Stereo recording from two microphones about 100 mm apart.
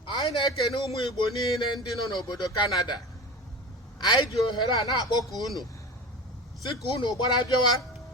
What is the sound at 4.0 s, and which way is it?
A man's voice, 50° left (ahead or behind).